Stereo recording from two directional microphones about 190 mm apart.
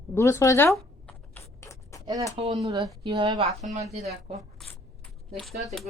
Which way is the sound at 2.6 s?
20° right (ahead or behind).